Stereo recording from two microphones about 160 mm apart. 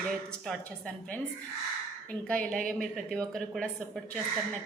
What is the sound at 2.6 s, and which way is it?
Speech, 60° right (ahead or behind).